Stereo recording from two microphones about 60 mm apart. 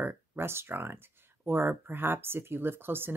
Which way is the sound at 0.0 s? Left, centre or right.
Right.